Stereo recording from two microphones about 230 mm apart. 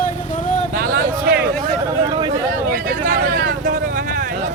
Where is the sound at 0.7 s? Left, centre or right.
Right.